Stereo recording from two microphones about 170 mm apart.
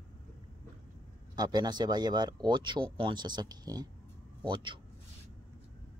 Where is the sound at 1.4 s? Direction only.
25° right (ahead or behind).